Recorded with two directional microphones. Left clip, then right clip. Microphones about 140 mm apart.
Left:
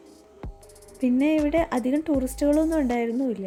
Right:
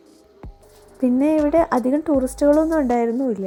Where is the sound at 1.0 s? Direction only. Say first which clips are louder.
Right 5 dB; 25° right (ahead or behind).